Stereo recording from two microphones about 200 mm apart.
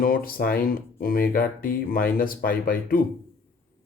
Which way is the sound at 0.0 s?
45° left (ahead or behind).